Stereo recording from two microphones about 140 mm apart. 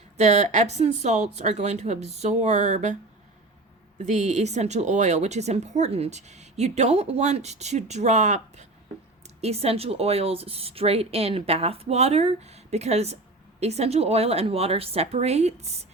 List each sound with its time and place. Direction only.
0.2 s a woman's voice: 55° right (ahead or behind)